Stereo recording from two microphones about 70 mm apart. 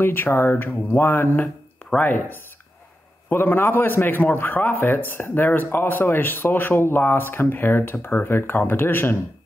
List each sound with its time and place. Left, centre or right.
0.0 s a man's voice: left